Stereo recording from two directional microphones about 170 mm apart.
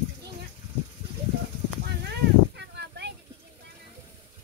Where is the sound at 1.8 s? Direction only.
80° right.